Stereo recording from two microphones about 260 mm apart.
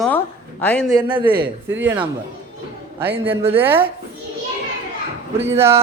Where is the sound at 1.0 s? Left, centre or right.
Centre.